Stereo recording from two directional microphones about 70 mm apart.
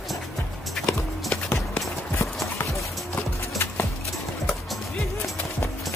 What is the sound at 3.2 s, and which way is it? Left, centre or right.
Clip-clop, left.